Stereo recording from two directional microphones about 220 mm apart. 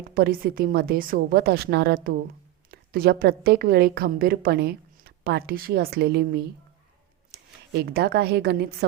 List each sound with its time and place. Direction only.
0.1 s a woman's voice: 40° right (ahead or behind)